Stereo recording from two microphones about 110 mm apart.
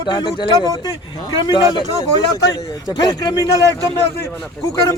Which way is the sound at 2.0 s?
35° left (ahead or behind).